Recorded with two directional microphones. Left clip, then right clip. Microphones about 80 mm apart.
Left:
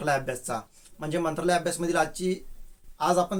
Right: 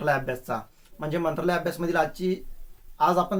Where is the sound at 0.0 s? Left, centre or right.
Left.